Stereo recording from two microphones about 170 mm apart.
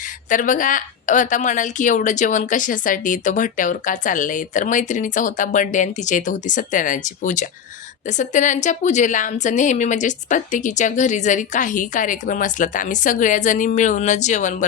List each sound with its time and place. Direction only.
0.3 s a woman's voice: 50° left (ahead or behind)